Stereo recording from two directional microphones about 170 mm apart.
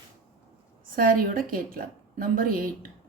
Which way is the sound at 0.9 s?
60° right (ahead or behind).